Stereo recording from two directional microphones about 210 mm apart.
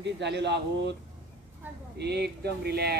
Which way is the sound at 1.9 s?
50° right (ahead or behind).